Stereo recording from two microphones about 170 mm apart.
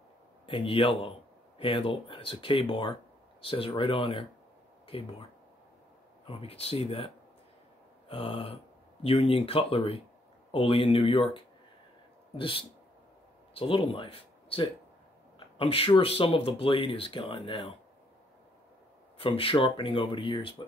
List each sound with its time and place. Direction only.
0.5 s speech: 30° left (ahead or behind)
6.2 s speech: 35° left (ahead or behind)
8.1 s speech: 30° left (ahead or behind)
19.1 s speech: 30° left (ahead or behind)